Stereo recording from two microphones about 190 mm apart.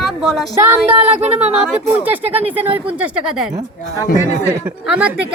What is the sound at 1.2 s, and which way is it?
Speech, 35° right (ahead or behind).